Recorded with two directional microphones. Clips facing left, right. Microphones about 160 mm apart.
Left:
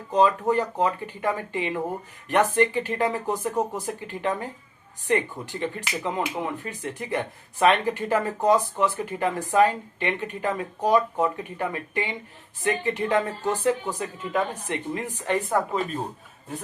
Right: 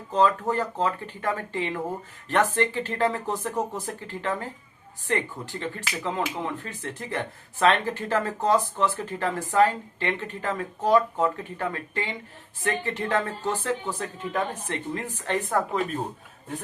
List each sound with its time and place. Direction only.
0.1 s speech: 15° left (ahead or behind)